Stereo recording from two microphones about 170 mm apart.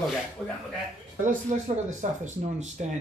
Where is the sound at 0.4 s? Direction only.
5° right (ahead or behind).